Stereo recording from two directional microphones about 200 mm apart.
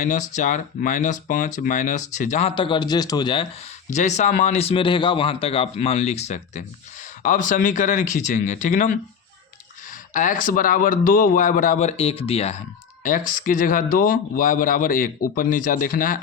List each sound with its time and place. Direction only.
0.0 s speech: 35° left (ahead or behind)
3.8 s speech: 35° left (ahead or behind)
10.1 s speech: 40° left (ahead or behind)
13.0 s speech: 45° left (ahead or behind)